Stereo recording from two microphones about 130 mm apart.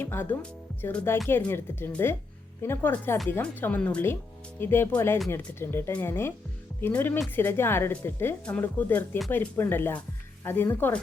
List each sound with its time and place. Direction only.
0.0 s speech: 15° left (ahead or behind)